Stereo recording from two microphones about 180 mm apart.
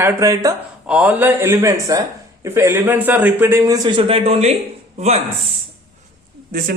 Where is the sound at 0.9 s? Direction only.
5° right (ahead or behind); by 5.2 s 40° right (ahead or behind).